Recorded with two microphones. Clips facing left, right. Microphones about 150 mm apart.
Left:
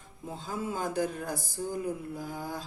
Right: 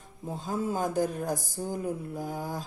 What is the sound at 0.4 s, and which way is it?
A woman's voice, 45° right (ahead or behind).